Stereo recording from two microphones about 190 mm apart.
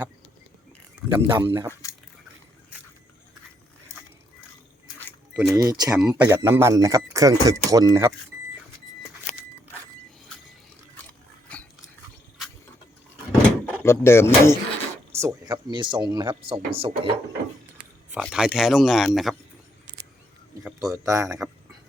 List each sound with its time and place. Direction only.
0.9 s speech: 15° right (ahead or behind)
5.3 s speech: 5° right (ahead or behind)
5.5 s speech: 20° right (ahead or behind)
11.5 s a sound: 5° left (ahead or behind)
13.8 s speech: 10° left (ahead or behind)
15.1 s speech: 15° right (ahead or behind)
18.2 s speech: centre (ahead or behind)
20.7 s a sound: 5° right (ahead or behind)
21.0 s speech: 15° right (ahead or behind)